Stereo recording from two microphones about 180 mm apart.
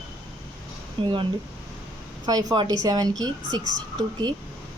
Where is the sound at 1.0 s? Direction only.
25° right (ahead or behind).